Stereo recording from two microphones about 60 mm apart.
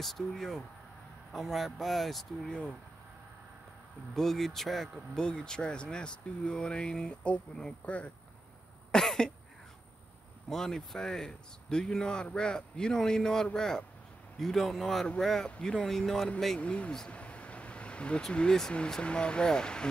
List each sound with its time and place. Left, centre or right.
0.0 s speech: centre
4.1 s speech: centre
5.2 s speech: centre
8.9 s cough: centre
10.5 s speech: centre
16.5 s speech: centre